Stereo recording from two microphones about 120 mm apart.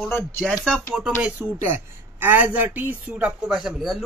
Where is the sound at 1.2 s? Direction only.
15° right (ahead or behind).